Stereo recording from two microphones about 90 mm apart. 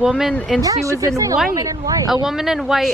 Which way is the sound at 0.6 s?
40° right (ahead or behind).